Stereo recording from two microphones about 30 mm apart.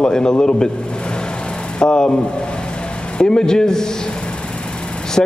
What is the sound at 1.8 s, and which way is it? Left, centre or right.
Speech, left.